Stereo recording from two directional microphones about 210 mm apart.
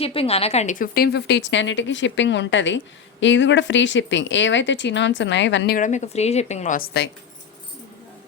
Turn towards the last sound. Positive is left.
turn(degrees=50)  # may be behind; listen again after turning